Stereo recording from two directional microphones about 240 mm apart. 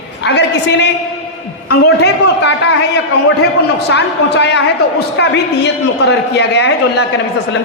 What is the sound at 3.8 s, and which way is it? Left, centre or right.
A woman's voice, left.